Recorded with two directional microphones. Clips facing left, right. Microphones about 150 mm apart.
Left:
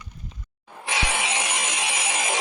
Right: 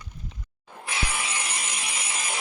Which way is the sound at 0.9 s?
90° left.